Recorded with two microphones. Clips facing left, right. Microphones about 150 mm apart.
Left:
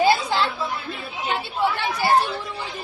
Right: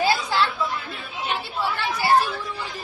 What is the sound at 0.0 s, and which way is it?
Chatter, 20° left (ahead or behind).